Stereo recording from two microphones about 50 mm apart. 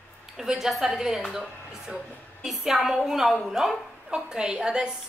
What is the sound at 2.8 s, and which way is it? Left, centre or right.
Speech, centre.